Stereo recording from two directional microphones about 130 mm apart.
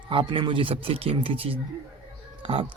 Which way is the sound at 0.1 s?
40° right (ahead or behind).